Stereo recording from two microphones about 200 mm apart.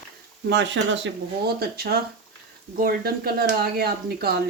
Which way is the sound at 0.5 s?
60° right (ahead or behind).